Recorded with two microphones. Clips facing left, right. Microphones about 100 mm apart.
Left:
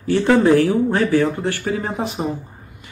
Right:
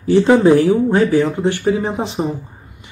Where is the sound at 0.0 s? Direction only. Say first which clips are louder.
Right 4 dB; 15° right (ahead or behind).